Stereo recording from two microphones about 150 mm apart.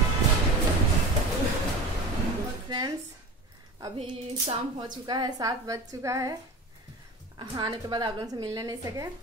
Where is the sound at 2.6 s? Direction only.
30° right (ahead or behind).